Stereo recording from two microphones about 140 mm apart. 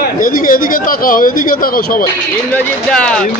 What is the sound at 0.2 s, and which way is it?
Speech, 80° left.